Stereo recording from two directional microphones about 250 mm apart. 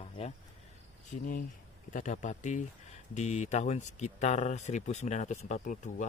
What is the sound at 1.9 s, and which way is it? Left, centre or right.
Speech, left.